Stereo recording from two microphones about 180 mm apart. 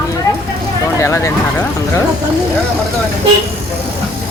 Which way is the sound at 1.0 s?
15° left (ahead or behind).